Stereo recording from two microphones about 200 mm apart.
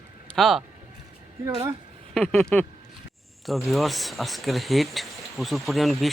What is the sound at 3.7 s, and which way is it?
Speech, centre (ahead or behind).